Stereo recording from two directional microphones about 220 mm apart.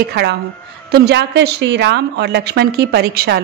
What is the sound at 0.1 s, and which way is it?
A woman's voice, 50° right (ahead or behind).